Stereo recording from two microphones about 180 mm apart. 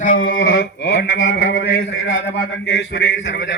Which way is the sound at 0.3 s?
60° left (ahead or behind).